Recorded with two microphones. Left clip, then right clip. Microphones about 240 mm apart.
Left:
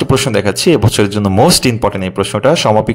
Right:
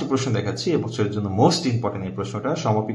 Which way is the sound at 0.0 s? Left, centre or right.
Left.